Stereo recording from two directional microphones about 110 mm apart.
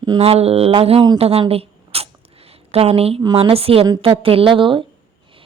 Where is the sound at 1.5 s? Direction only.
65° right (ahead or behind).